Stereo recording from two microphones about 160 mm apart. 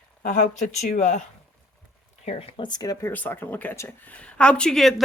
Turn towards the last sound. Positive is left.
turn(degrees=0)  # may be behind; listen again after turning